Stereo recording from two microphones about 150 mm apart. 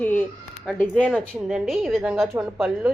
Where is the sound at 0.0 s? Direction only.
15° left (ahead or behind).